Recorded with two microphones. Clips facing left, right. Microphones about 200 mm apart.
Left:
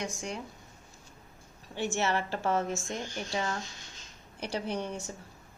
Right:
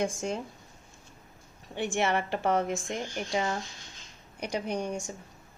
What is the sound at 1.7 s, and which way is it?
A woman's voice, 15° right (ahead or behind).